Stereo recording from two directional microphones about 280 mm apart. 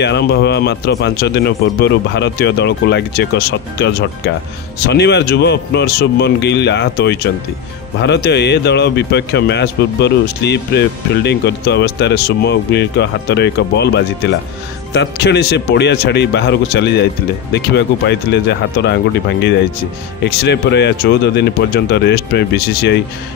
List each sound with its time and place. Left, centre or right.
0.0 s a man's voice: left